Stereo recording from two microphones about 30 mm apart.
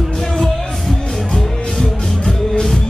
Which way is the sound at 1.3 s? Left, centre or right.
Centre.